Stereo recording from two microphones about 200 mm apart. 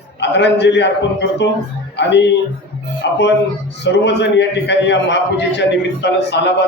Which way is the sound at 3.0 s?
60° left (ahead or behind).